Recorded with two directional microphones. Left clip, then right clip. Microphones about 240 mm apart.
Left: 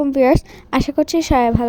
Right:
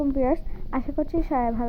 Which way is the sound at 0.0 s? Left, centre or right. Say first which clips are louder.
Left 10 dB; left.